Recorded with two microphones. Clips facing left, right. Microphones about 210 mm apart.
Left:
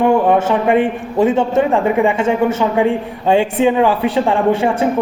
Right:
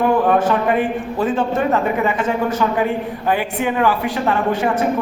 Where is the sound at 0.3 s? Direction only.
25° left (ahead or behind).